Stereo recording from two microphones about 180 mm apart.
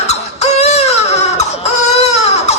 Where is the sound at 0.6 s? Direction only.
35° left (ahead or behind).